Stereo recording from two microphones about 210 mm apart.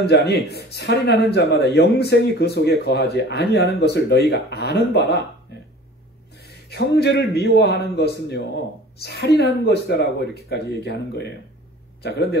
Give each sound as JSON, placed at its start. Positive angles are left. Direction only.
{"t": 0.0, "sound": "speech", "side_deg": 50}
{"t": 6.3, "sound": "speech", "side_deg": 50}